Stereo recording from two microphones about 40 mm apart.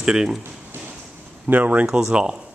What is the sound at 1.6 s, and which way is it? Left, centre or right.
Speech, right.